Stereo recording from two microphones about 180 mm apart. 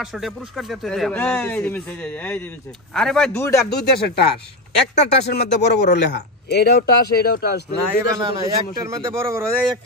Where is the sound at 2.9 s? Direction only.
5° left (ahead or behind).